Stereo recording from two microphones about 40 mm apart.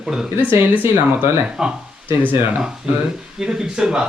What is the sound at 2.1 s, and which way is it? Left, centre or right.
Speech, right.